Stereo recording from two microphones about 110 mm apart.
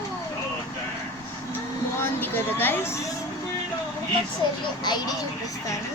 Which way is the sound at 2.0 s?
20° left (ahead or behind).